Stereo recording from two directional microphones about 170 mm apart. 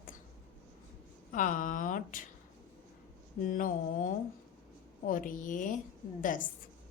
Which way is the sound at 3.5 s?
50° left (ahead or behind).